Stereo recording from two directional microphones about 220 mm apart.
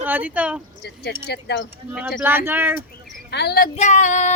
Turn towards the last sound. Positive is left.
turn(degrees=35)  # may be behind; listen again after turning